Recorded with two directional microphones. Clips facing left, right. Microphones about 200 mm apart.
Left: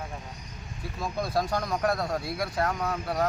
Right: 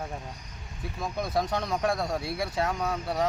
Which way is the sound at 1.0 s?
Centre (ahead or behind).